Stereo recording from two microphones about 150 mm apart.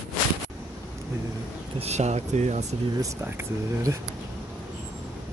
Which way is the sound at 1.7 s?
45° right (ahead or behind).